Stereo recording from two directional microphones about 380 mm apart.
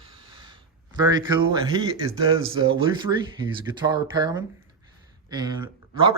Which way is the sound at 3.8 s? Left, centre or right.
Centre.